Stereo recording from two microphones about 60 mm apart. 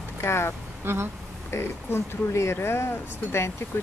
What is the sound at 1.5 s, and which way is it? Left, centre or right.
Speech, left.